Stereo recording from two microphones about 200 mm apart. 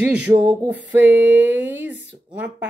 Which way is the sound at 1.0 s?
10° right (ahead or behind).